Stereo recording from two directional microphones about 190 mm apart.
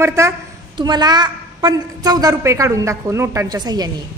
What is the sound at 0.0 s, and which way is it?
A woman's voice, 15° right (ahead or behind).